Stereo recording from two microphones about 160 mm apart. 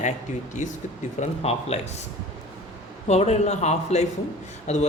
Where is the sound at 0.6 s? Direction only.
50° left (ahead or behind).